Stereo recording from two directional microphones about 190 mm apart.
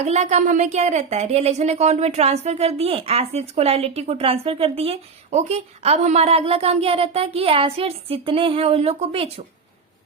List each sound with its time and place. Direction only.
0.0 s a woman's voice: 35° right (ahead or behind)